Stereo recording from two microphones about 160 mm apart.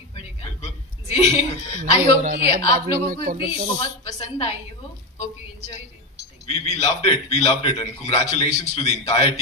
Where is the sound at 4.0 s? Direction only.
35° left (ahead or behind).